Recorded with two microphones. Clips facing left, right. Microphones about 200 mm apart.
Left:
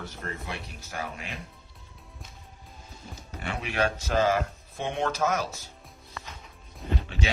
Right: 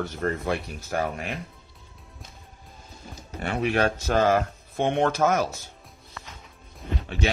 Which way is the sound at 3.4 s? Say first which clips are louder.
Right 5 dB; 50° right (ahead or behind).